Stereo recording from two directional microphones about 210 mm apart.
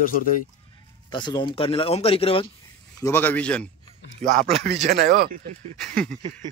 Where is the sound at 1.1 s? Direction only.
20° left (ahead or behind).